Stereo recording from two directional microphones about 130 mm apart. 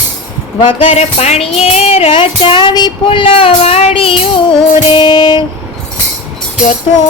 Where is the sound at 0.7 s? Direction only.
50° left (ahead or behind).